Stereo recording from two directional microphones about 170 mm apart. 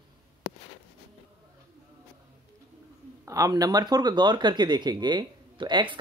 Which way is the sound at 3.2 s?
20° right (ahead or behind).